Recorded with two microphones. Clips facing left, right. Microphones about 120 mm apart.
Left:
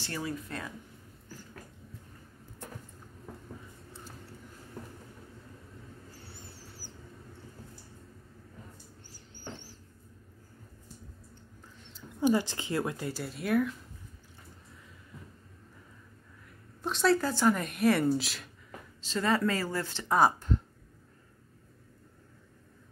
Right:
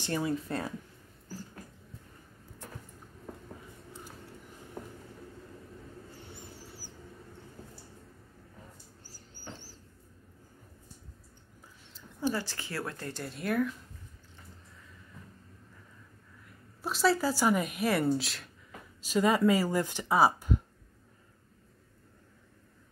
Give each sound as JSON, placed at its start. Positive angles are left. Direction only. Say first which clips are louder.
{"t": 0.0, "sound": "speech", "louder": "right 5 dB", "side_deg": -20}
{"t": 6.1, "sound": "vehicle", "louder": "right 2 dB", "side_deg": -15}
{"t": 9.0, "sound": "a sound", "louder": "left 2 dB", "side_deg": -35}
{"t": 12.2, "sound": "speech", "louder": "left 6 dB", "side_deg": 20}
{"t": 16.4, "sound": "a woman's voice", "louder": "left 1 dB", "side_deg": -5}
{"t": 18.9, "sound": "speech", "louder": "right 3 dB", "side_deg": -10}